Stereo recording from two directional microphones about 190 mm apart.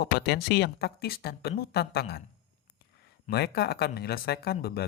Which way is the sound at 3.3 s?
60° left (ahead or behind).